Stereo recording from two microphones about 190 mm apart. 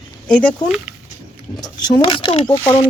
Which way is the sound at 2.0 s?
25° left (ahead or behind).